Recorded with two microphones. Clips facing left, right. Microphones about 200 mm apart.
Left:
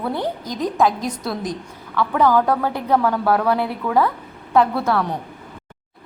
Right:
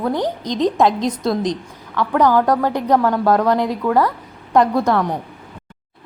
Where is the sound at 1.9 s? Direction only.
15° right (ahead or behind).